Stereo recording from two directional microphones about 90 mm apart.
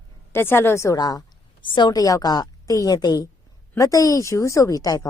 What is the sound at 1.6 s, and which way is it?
A woman's voice, 60° left (ahead or behind).